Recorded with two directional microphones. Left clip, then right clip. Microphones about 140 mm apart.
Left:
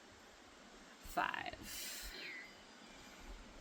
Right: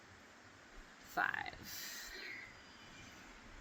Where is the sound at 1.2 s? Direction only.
50° left (ahead or behind); by 2.3 s 65° left (ahead or behind).